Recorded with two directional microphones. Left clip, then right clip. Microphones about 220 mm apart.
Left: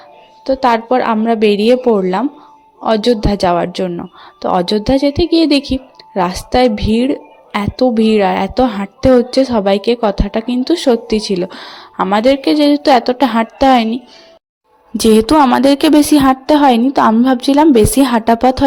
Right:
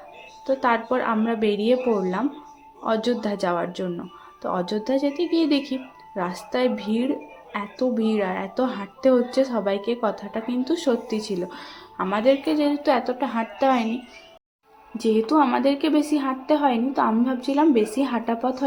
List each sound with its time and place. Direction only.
0.4 s a woman's voice: 30° left (ahead or behind)
14.9 s a woman's voice: 45° left (ahead or behind)